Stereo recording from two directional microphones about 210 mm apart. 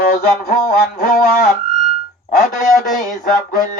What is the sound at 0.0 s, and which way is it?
Music, 45° left (ahead or behind).